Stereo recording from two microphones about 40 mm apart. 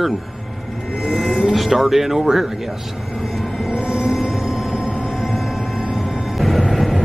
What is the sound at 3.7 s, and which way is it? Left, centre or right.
Music, right.